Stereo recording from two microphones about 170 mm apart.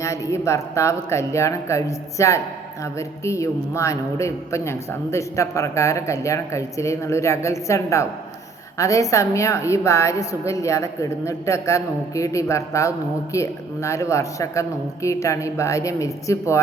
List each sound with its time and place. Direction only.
0.0 s a man's voice: 20° left (ahead or behind)